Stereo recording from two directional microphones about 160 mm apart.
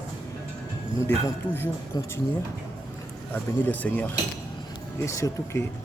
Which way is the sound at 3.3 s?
10° left (ahead or behind).